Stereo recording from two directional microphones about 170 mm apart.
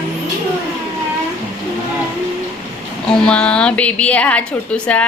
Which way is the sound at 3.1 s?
5° left (ahead or behind).